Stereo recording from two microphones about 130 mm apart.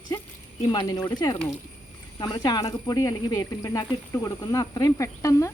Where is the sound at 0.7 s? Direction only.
30° left (ahead or behind).